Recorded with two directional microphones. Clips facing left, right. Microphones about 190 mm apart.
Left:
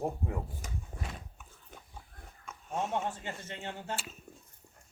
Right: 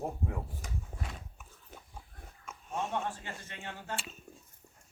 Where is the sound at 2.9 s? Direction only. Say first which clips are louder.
Left 2 dB; 25° left (ahead or behind).